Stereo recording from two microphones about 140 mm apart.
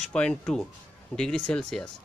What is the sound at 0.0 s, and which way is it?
A man's voice, 5° left (ahead or behind).